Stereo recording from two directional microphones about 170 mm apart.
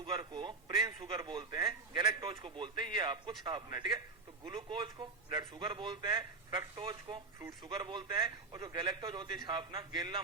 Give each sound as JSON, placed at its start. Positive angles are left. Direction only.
{"t": 0.0, "sound": "a man's voice", "side_deg": -30}